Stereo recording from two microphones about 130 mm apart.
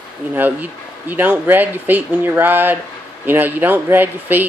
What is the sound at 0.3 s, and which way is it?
Speech, 10° right (ahead or behind).